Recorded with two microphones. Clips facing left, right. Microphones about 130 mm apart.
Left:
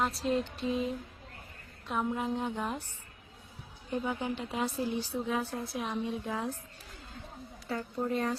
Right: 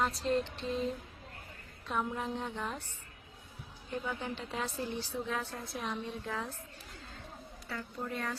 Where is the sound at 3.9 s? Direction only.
15° left (ahead or behind).